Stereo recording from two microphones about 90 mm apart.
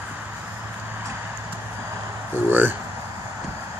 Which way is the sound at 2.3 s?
20° right (ahead or behind).